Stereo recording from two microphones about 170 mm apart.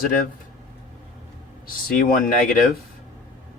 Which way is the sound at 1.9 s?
55° left (ahead or behind).